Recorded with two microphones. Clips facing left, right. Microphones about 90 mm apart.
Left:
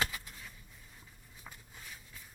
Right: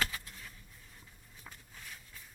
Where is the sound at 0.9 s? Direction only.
5° left (ahead or behind).